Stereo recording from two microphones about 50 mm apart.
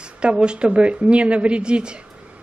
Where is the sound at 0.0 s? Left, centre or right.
Right.